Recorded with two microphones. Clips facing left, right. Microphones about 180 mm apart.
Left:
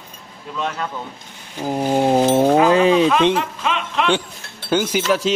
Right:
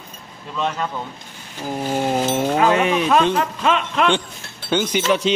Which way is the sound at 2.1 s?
35° left (ahead or behind).